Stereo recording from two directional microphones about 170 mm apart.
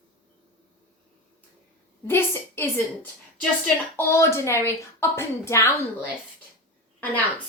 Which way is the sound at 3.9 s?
15° left (ahead or behind).